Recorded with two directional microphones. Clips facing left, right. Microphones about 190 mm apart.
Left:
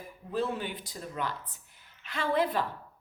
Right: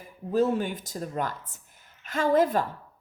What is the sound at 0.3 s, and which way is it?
Speech, 45° right (ahead or behind).